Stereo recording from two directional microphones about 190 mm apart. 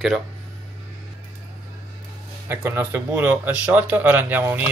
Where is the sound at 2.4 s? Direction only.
10° right (ahead or behind).